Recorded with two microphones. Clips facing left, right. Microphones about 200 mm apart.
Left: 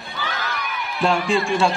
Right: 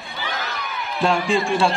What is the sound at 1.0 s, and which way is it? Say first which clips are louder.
Speech: even; centre (ahead or behind).